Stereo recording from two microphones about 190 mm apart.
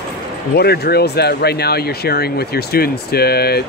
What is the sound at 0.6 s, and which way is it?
Speech, 55° left (ahead or behind).